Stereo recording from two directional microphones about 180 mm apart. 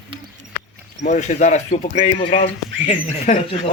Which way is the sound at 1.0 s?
40° left (ahead or behind).